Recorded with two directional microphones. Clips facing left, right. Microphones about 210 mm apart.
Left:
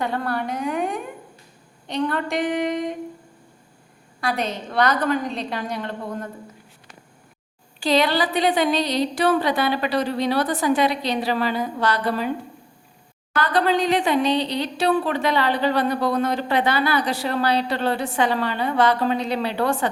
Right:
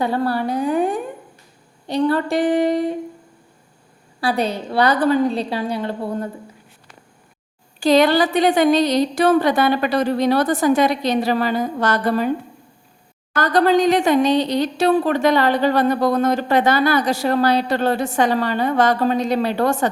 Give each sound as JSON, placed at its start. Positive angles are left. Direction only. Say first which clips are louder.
{"t": 0.0, "sound": "a woman's voice", "louder": "right 5 dB", "side_deg": -35}
{"t": 2.0, "sound": "a woman's voice", "louder": "right 7 dB", "side_deg": -35}
{"t": 4.2, "sound": "a woman's voice", "louder": "right 5 dB", "side_deg": -35}
{"t": 7.8, "sound": "speech", "louder": "right 6 dB", "side_deg": -45}
{"t": 13.3, "sound": "speech", "louder": "right 5 dB", "side_deg": -45}